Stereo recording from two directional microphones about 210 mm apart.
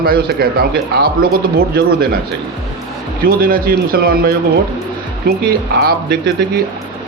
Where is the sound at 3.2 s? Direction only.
45° right (ahead or behind).